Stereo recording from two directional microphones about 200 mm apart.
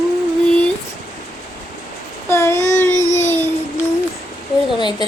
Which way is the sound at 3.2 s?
10° left (ahead or behind).